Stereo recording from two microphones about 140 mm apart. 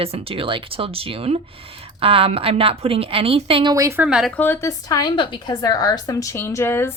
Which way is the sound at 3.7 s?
20° right (ahead or behind).